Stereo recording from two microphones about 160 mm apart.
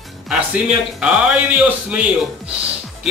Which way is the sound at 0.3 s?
5° right (ahead or behind).